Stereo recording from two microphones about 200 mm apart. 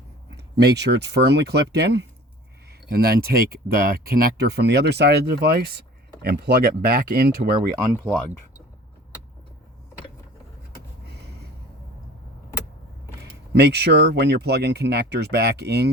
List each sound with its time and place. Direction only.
0.3 s speech: 55° right (ahead or behind)
13.5 s speech: 55° right (ahead or behind)